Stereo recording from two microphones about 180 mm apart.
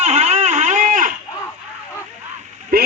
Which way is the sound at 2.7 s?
55° right (ahead or behind).